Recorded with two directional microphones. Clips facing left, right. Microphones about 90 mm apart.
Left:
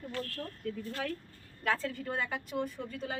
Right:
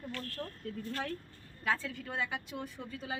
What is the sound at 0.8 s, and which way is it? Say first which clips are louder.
Speech: right 1 dB; 35° right (ahead or behind).